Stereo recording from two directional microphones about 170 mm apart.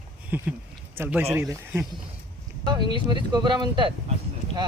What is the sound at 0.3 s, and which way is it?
Speech, 10° right (ahead or behind).